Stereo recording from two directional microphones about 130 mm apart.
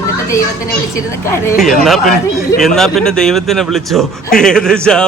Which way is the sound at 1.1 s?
20° left (ahead or behind).